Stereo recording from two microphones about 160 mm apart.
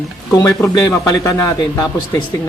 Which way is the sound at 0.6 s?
20° left (ahead or behind).